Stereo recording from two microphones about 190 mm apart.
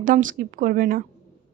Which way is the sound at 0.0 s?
45° right (ahead or behind).